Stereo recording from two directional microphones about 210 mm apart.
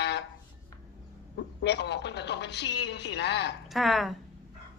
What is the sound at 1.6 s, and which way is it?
Speech, 55° left (ahead or behind).